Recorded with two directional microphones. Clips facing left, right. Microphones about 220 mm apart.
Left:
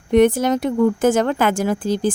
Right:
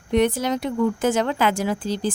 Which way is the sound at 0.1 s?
50° left (ahead or behind).